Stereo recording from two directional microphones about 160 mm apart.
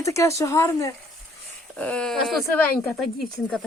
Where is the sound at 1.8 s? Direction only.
5° left (ahead or behind).